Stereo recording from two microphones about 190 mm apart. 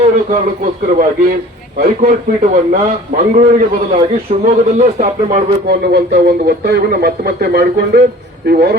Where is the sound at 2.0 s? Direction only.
40° right (ahead or behind).